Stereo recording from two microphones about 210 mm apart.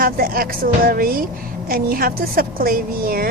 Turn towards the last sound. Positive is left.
turn(degrees=-45)  # may be behind; listen again after turning